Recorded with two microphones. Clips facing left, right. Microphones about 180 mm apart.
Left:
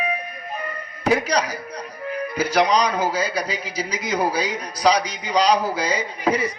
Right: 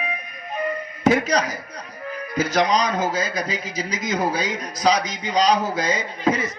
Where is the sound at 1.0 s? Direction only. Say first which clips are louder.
Right 1 dB; 35° left (ahead or behind).